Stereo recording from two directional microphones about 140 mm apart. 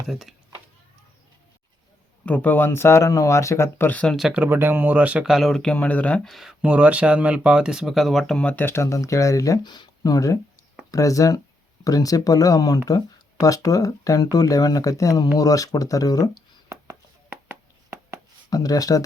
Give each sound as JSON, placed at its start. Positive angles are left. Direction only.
{"t": 0.0, "sound": "speech", "side_deg": 0}
{"t": 2.2, "sound": "speech", "side_deg": 10}
{"t": 4.4, "sound": "speech", "side_deg": -15}
{"t": 5.7, "sound": "speech", "side_deg": 10}
{"t": 16.6, "sound": "a sound", "side_deg": -20}
{"t": 18.5, "sound": "speech", "side_deg": 25}